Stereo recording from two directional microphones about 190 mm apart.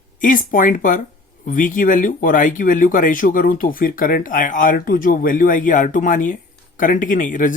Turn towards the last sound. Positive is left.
turn(degrees=45)  # may be behind; listen again after turning